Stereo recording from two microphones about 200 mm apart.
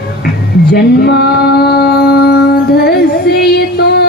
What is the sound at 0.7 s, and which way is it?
Music, 55° left (ahead or behind).